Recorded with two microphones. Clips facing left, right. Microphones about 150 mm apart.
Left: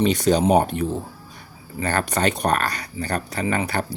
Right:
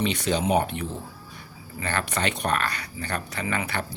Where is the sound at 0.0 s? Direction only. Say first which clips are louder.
Left 7 dB; 40° left (ahead or behind).